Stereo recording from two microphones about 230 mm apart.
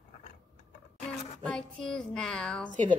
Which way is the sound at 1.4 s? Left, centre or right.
Centre.